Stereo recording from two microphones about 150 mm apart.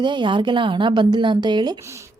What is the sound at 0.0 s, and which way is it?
A woman's voice, 30° right (ahead or behind).